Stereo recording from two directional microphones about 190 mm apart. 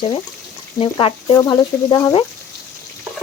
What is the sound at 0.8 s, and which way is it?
Speech, 30° left (ahead or behind).